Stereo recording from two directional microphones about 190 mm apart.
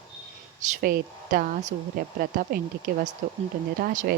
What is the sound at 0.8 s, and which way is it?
Speech, 50° right (ahead or behind).